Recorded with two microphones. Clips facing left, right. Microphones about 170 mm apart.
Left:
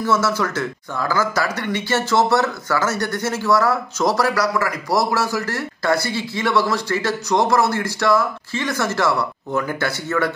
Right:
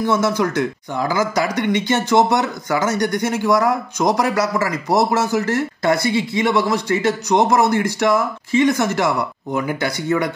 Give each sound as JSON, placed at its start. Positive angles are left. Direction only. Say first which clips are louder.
{"t": 0.0, "sound": "speech", "louder": "right 2 dB", "side_deg": -15}